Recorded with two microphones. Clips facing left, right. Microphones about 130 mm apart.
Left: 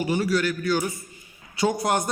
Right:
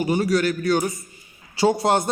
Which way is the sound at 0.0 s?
25° right (ahead or behind).